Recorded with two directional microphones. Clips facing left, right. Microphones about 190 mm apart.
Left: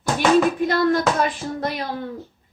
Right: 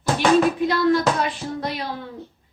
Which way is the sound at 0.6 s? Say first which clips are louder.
Even; 50° left (ahead or behind).